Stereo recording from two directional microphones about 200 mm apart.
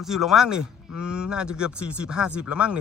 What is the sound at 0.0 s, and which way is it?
A man's voice, centre (ahead or behind).